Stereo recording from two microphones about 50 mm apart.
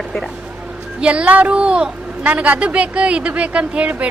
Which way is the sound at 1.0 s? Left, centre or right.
Right.